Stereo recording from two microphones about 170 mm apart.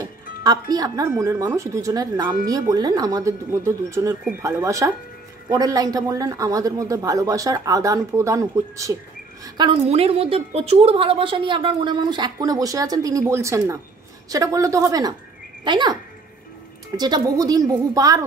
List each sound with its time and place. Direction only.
0.4 s a woman's voice: 20° right (ahead or behind)
9.8 s a woman's voice: 35° right (ahead or behind); by 18.2 s 20° right (ahead or behind)